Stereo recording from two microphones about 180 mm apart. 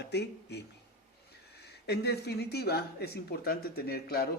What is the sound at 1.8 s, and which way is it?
A man's voice, 65° left (ahead or behind).